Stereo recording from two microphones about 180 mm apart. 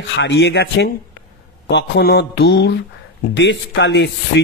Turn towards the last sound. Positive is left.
turn(degrees=80)